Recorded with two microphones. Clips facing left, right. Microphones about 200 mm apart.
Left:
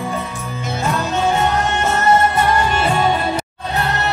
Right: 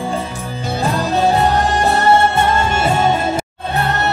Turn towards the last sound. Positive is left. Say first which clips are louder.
# right 1 dB
turn(degrees=-25)  # may be behind; listen again after turning